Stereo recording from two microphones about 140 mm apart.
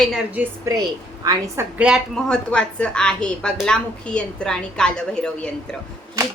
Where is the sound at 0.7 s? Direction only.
25° right (ahead or behind).